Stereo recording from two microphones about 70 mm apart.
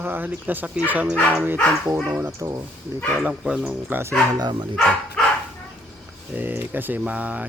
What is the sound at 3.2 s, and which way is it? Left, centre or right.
Speech, centre.